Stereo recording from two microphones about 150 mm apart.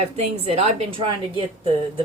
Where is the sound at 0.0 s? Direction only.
45° right (ahead or behind).